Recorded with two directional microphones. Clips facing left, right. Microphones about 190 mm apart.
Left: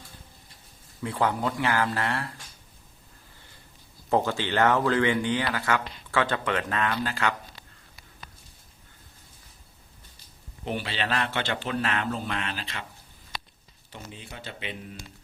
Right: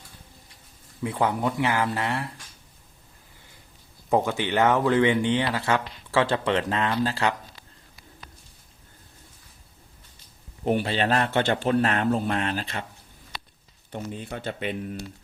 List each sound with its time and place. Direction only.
1.0 s speech: 20° right (ahead or behind)
4.3 s speech: 15° right (ahead or behind)
10.7 s a man's voice: 45° right (ahead or behind)
13.9 s a man's voice: 50° right (ahead or behind)